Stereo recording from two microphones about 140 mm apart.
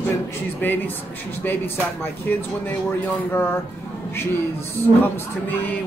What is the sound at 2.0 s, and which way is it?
Speech, 15° left (ahead or behind).